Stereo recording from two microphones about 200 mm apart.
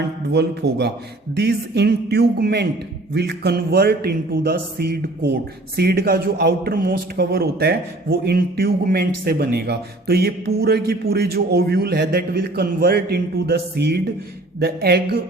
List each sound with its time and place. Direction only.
0.3 s a man's voice: 55° right (ahead or behind)